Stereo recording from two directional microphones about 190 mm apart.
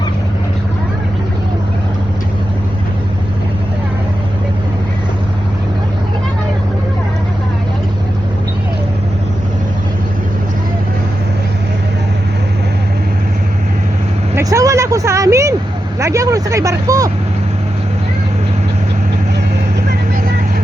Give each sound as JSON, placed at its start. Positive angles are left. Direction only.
{"t": 14.3, "sound": "vehicle", "side_deg": -15}